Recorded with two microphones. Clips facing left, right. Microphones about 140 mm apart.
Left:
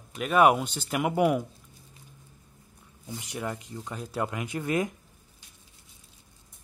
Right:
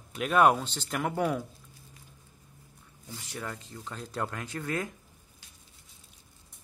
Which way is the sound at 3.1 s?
15° left (ahead or behind).